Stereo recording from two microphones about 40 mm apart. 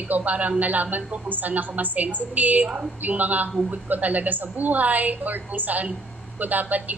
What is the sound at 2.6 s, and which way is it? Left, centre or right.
Speech, right.